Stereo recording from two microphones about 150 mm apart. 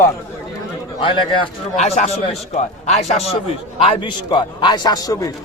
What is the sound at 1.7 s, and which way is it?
A man's voice, 50° left (ahead or behind).